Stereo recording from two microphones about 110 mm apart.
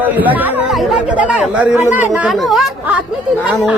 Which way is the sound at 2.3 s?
Centre (ahead or behind).